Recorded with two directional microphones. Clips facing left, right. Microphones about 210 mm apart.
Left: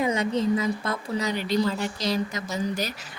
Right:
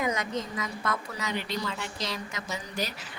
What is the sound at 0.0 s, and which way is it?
A woman's voice, 30° left (ahead or behind).